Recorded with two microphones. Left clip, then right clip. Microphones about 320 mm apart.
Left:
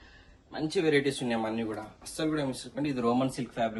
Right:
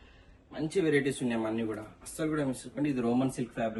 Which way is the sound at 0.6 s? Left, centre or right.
Centre.